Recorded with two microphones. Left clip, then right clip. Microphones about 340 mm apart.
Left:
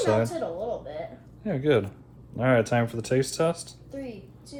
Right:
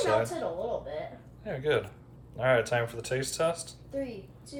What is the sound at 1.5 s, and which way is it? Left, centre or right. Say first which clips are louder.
Speech: left 5 dB; centre.